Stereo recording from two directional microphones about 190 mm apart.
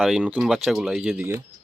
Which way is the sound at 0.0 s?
Centre (ahead or behind).